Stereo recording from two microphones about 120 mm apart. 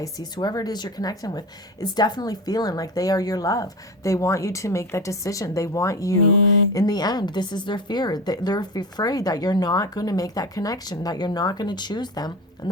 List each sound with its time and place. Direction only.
0.0 s a woman's voice: 35° left (ahead or behind)